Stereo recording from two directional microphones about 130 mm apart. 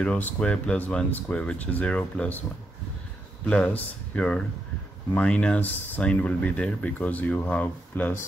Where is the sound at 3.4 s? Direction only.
10° left (ahead or behind).